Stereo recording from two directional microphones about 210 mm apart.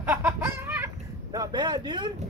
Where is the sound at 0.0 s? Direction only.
10° right (ahead or behind).